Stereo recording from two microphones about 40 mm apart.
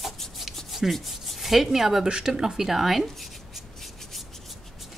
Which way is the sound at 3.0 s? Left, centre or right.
Centre.